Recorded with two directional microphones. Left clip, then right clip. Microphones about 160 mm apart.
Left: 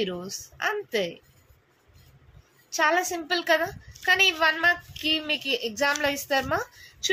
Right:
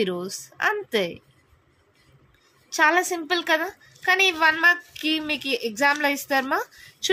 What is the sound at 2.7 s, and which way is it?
A woman's voice, 50° right (ahead or behind).